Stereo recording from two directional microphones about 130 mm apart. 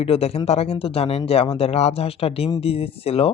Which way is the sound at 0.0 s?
50° left (ahead or behind).